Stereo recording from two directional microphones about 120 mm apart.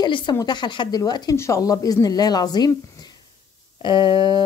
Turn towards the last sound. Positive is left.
turn(degrees=40)  # may be behind; listen again after turning